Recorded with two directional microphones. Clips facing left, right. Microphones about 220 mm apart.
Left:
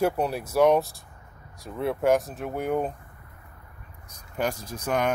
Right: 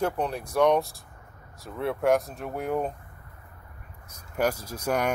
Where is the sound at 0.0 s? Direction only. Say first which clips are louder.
Left 3 dB; 10° left (ahead or behind).